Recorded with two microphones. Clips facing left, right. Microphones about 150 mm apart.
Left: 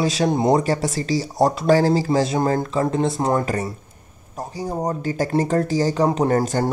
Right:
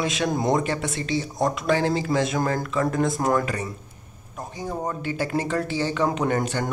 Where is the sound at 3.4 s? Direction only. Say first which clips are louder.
Left 5 dB; 40° left (ahead or behind).